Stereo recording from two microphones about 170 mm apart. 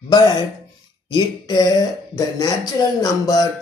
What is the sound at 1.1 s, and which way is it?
Speech, 25° left (ahead or behind).